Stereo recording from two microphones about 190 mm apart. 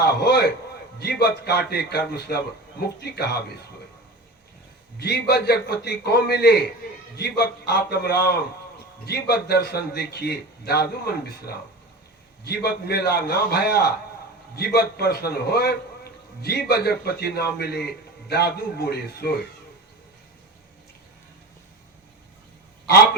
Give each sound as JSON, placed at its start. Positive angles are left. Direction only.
{"t": 0.0, "sound": "a sound", "side_deg": 60}
{"t": 0.9, "sound": "a man's voice", "side_deg": 60}
{"t": 4.9, "sound": "a man's voice", "side_deg": 55}